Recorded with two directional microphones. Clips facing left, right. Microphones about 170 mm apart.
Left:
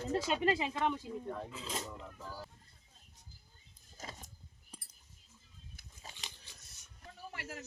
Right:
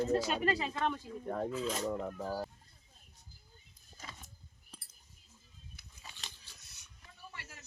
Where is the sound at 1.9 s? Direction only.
55° right (ahead or behind).